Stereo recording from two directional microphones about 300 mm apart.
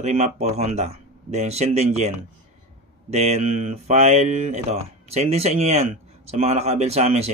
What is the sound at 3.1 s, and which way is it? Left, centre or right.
Mantra, right.